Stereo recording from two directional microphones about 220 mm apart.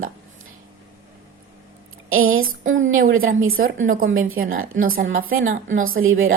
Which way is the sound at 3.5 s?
40° right (ahead or behind).